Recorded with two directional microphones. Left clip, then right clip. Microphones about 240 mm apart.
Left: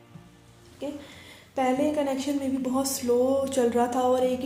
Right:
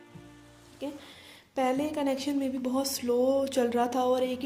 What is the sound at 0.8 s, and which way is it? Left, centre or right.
A woman's voice, right.